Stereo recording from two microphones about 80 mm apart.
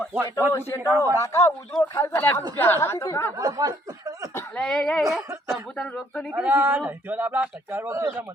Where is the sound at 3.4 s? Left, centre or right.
Right.